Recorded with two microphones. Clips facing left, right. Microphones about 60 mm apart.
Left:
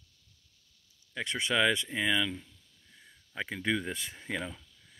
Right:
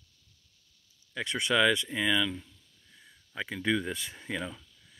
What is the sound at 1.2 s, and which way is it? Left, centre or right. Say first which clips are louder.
Speech: right 2 dB; left.